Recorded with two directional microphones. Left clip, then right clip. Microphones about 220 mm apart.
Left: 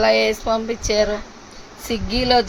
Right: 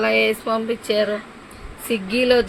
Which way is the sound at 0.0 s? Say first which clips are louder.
Left 2 dB; 50° left (ahead or behind).